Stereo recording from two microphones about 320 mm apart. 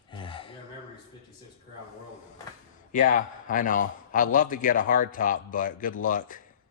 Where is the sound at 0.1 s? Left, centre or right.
Centre.